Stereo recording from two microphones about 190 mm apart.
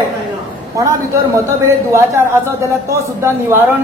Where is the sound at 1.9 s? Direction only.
15° right (ahead or behind).